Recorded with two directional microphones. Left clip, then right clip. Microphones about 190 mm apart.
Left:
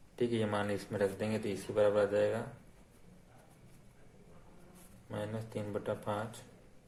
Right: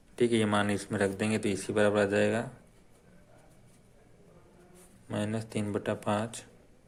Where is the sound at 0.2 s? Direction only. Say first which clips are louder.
Right 7 dB; 35° right (ahead or behind).